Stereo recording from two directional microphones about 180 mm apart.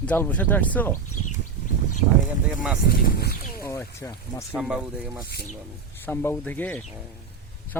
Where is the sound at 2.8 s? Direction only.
55° left (ahead or behind).